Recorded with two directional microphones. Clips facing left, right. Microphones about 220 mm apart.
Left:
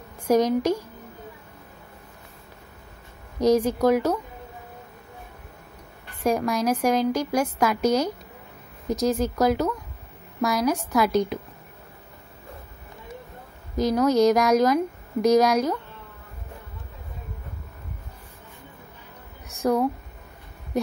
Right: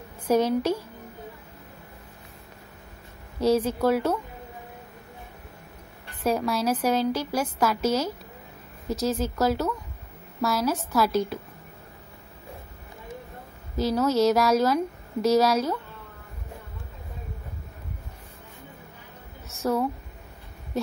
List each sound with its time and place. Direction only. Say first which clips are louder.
0.3 s a woman's voice: left 2 dB; 15° left (ahead or behind)
3.3 s a woman's voice: left 3 dB; 15° left (ahead or behind)
6.2 s a woman's voice: left 2 dB; 15° left (ahead or behind)
13.7 s a woman's voice: left 3 dB; 15° left (ahead or behind)
19.4 s a sound: left 3 dB; 15° left (ahead or behind)
20.7 s a woman's voice: left 3 dB; 15° left (ahead or behind)